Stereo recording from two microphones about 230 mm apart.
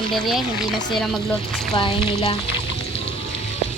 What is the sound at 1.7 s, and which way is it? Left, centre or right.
Speech, left.